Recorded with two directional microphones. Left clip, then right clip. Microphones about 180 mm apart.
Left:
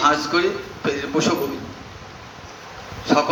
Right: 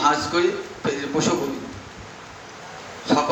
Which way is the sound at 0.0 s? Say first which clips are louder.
Left 2 dB; 25° left (ahead or behind).